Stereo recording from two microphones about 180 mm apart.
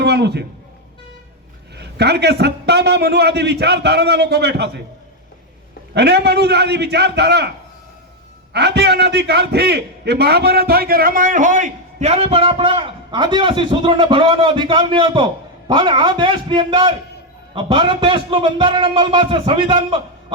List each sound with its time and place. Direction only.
0.0 s a man's voice: 65° right (ahead or behind)
1.7 s a man's voice: 65° right (ahead or behind)
5.9 s a man's voice: 65° right (ahead or behind)
8.5 s a man's voice: 65° right (ahead or behind); by 20.0 s 25° right (ahead or behind)